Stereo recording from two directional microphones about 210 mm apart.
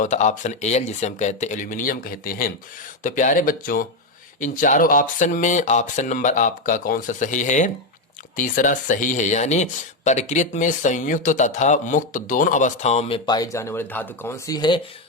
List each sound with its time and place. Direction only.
0.0 s speech: 35° left (ahead or behind); by 14.8 s 20° left (ahead or behind)